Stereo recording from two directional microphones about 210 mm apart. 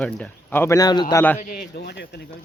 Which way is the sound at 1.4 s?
45° left (ahead or behind).